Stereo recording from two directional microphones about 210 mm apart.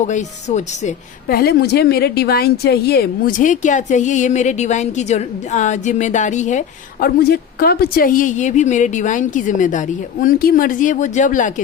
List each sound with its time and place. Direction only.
0.0 s speech: 35° left (ahead or behind)